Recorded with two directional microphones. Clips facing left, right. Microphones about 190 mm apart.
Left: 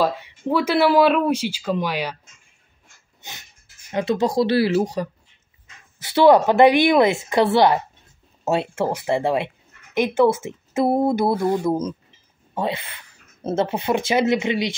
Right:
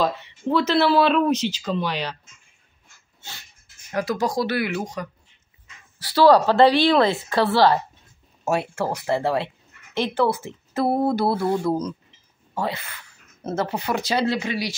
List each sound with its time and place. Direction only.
0.0 s speech: 10° left (ahead or behind)
3.2 s dog: 20° left (ahead or behind)
3.9 s speech: 25° left (ahead or behind)
5.9 s speech: 20° left (ahead or behind)